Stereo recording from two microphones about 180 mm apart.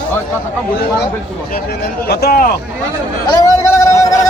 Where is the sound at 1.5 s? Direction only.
60° left (ahead or behind).